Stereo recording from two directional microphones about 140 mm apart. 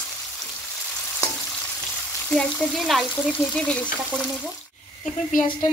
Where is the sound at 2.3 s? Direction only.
5° left (ahead or behind).